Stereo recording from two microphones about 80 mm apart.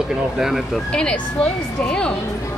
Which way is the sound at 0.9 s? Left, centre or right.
Centre.